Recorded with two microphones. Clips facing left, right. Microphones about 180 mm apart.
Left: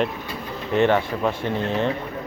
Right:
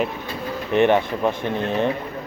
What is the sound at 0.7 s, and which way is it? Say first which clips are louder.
Speech: right 2 dB; 20° right (ahead or behind).